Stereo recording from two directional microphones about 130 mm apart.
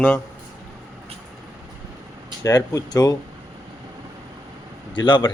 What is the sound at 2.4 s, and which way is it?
Speech, 25° left (ahead or behind).